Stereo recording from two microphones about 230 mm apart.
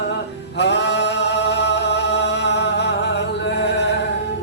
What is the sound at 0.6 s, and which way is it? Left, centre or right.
Chant, left.